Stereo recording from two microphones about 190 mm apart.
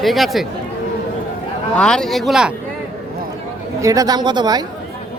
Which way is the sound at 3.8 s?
20° right (ahead or behind).